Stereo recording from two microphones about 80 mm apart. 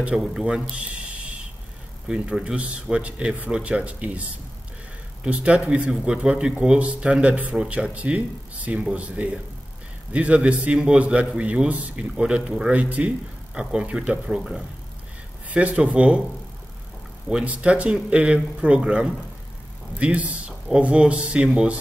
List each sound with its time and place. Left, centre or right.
0.0 s a man's voice: centre
2.0 s a man's voice: centre
5.2 s a man's voice: centre
15.5 s a man's voice: centre
17.3 s a man's voice: centre